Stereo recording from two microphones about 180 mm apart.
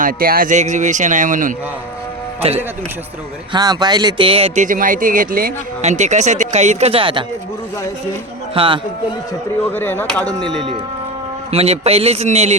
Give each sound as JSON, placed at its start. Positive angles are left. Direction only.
{"t": 0.0, "sound": "speech", "side_deg": -55}
{"t": 2.4, "sound": "speech", "side_deg": -35}
{"t": 3.5, "sound": "speech", "side_deg": -25}
{"t": 4.6, "sound": "speech", "side_deg": -50}
{"t": 8.5, "sound": "speech", "side_deg": -30}
{"t": 9.6, "sound": "speech", "side_deg": 10}
{"t": 10.2, "sound": "speech", "side_deg": -20}
{"t": 11.5, "sound": "speech", "side_deg": -35}